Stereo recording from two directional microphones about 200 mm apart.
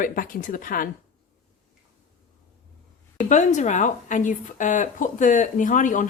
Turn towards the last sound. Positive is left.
turn(degrees=40)  # may be behind; listen again after turning